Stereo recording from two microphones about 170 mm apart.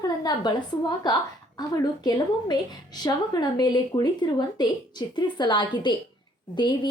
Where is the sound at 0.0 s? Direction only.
25° left (ahead or behind).